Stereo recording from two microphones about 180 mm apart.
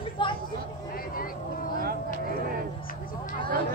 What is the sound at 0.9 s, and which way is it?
Vehicle, 55° left (ahead or behind).